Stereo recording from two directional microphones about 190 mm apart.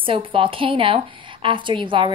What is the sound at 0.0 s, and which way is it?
A woman's voice, 25° right (ahead or behind).